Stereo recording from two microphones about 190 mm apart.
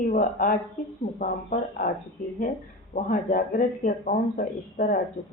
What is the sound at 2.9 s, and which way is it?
A woman's voice, 45° left (ahead or behind).